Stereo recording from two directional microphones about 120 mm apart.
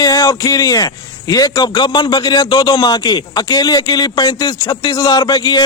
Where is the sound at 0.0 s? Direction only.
30° left (ahead or behind).